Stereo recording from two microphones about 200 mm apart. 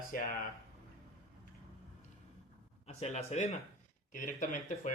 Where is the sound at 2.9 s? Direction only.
35° left (ahead or behind).